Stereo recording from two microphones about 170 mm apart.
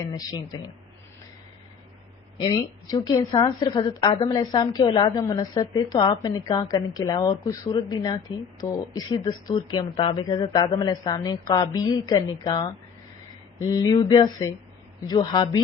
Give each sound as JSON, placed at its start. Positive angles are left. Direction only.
{"t": 0.1, "sound": "speech", "side_deg": 20}
{"t": 2.4, "sound": "speech", "side_deg": 20}
{"t": 8.6, "sound": "speech", "side_deg": 15}
{"t": 9.0, "sound": "speech", "side_deg": 25}